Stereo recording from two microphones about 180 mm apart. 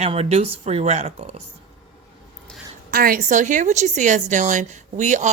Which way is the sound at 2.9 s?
55° right (ahead or behind).